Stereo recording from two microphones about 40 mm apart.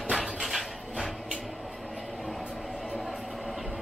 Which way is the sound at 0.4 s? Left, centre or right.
Centre.